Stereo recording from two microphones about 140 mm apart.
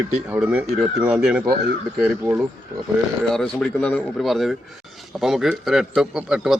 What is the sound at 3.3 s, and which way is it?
Speech, 5° left (ahead or behind).